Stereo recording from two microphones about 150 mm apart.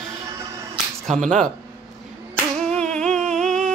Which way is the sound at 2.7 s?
5° left (ahead or behind).